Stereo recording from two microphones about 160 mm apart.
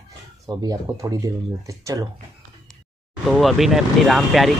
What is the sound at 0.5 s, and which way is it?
Speech, 20° right (ahead or behind).